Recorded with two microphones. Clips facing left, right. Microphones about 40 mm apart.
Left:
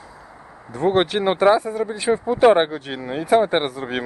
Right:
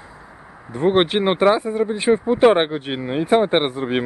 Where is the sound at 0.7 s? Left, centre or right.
Right.